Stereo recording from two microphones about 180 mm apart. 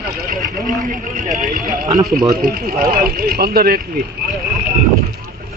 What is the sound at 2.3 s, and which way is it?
Speech, 55° right (ahead or behind).